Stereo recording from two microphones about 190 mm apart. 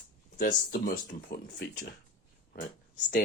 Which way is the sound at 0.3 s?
50° left (ahead or behind).